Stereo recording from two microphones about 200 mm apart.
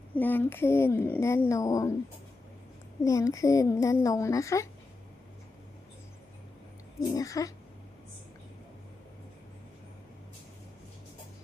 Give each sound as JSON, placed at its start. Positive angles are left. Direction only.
{"t": 0.2, "sound": "speech", "side_deg": 10}
{"t": 3.0, "sound": "speech", "side_deg": 15}
{"t": 7.2, "sound": "speech", "side_deg": 15}